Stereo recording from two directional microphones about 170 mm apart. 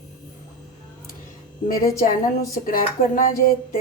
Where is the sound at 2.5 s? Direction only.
55° left (ahead or behind).